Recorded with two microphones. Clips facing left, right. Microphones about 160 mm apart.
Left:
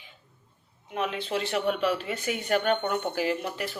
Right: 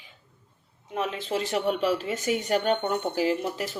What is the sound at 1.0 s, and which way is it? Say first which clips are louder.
Speech: right 1 dB; 40° right (ahead or behind).